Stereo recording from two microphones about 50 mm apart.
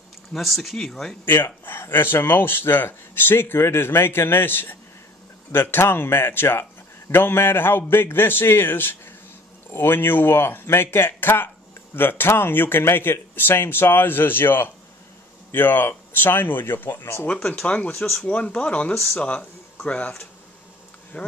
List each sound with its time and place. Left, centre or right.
0.3 s speech: centre
1.2 s speech: left
17.6 s speech: left
21.1 s speech: left